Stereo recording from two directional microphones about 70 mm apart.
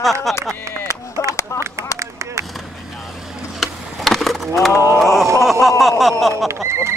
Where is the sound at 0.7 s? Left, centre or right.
Right.